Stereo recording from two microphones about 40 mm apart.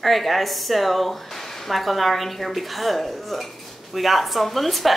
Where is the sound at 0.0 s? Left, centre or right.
Centre.